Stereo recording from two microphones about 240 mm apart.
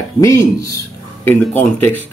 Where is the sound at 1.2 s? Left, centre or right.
Centre.